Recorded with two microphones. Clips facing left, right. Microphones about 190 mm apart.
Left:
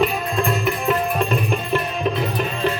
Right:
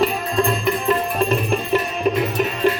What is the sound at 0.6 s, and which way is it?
Music, centre (ahead or behind).